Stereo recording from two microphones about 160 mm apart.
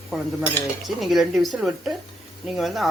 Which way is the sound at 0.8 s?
Centre (ahead or behind).